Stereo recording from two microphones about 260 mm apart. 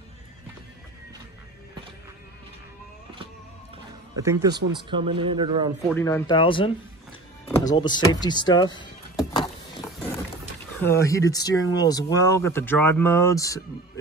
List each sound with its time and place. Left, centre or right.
4.2 s speech: centre
5.9 s speech: centre
7.6 s door: centre
10.8 s speech: centre